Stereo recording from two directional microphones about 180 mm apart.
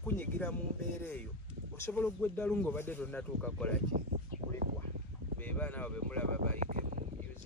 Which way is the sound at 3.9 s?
45° right (ahead or behind).